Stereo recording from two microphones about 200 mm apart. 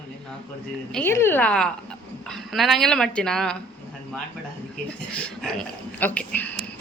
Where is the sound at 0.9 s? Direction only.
5° left (ahead or behind).